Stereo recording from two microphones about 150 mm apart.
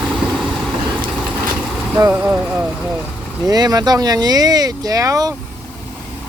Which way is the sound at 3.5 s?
25° right (ahead or behind).